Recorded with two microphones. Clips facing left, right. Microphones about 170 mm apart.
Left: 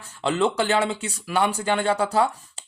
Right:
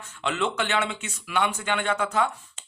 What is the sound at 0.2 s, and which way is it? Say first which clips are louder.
Speech: left 5 dB; 35° left (ahead or behind).